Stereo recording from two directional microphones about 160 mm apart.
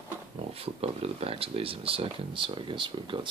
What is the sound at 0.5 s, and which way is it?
Speech, 35° right (ahead or behind).